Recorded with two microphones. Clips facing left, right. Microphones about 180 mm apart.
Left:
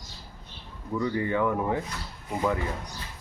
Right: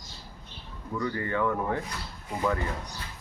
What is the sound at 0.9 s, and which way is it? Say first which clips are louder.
Speech: left 3 dB; 20° left (ahead or behind).